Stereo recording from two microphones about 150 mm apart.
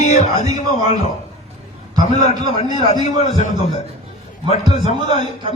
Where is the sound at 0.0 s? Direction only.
50° left (ahead or behind).